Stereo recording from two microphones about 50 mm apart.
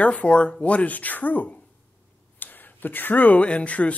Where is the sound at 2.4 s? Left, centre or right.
Left.